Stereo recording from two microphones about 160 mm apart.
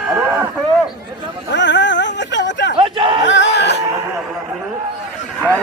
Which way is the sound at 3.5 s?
90° left.